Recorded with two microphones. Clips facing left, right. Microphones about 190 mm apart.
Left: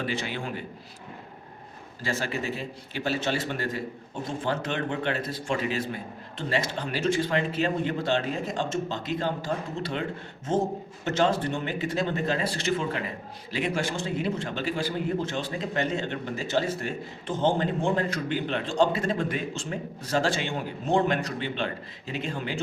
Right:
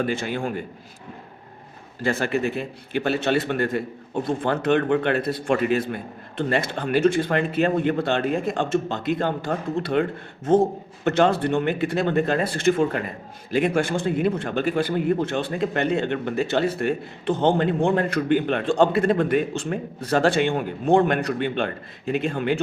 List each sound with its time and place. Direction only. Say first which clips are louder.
0.0 s a man's voice: right 6 dB; 50° right (ahead or behind)
2.0 s speech: right 7 dB; 60° right (ahead or behind)